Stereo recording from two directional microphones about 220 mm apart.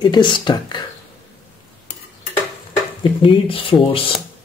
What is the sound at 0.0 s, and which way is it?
Speech, 20° left (ahead or behind).